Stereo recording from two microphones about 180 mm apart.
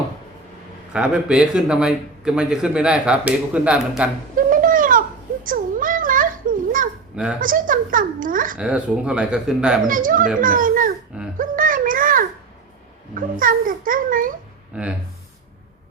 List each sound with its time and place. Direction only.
0.9 s speech: 5° right (ahead or behind)
4.4 s a sound: 50° right (ahead or behind)
7.3 s a child's voice: 50° right (ahead or behind)
8.5 s speech: 5° right (ahead or behind)
9.8 s a child's voice: 50° right (ahead or behind)
11.3 s a sound: 50° right (ahead or behind)
13.1 s a child's voice: 50° right (ahead or behind)
14.7 s speech: 5° right (ahead or behind)